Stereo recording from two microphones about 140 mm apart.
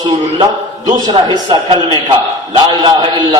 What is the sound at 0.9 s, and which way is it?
A man's voice, 30° right (ahead or behind).